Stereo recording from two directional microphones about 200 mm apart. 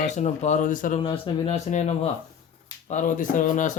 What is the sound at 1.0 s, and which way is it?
Speech, 30° left (ahead or behind).